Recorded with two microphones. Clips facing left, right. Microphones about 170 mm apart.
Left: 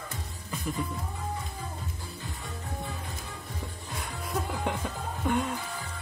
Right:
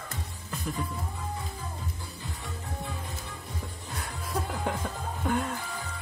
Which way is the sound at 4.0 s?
Centre (ahead or behind).